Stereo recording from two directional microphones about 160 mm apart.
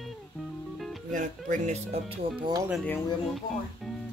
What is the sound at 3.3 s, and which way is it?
Speech, centre (ahead or behind).